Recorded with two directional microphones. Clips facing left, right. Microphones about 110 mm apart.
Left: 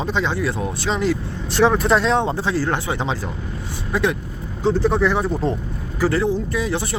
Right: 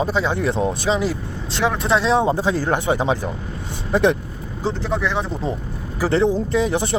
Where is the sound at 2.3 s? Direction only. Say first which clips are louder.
Right 2 dB; 15° right (ahead or behind).